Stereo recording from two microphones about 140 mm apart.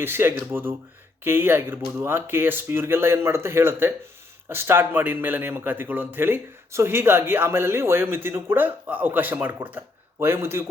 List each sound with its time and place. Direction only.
0.0 s a man's voice: 15° right (ahead or behind)